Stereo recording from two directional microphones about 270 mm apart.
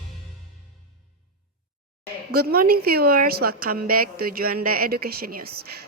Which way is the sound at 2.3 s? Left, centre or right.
Right.